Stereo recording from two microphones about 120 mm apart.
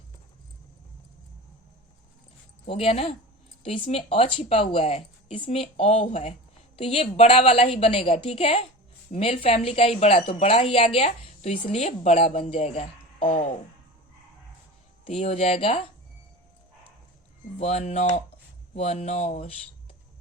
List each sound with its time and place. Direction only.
2.6 s a woman's voice: 55° left (ahead or behind)
6.7 s a woman's voice: 55° left (ahead or behind)
15.0 s a woman's voice: 60° left (ahead or behind)
17.6 s a woman's voice: 65° left (ahead or behind)